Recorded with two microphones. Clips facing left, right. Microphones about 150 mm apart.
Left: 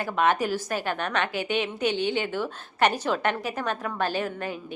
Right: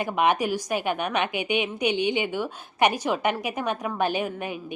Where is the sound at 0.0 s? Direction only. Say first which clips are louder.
Right 1 dB; 15° right (ahead or behind).